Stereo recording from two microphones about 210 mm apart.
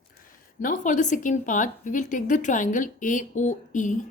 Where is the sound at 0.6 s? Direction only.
40° left (ahead or behind).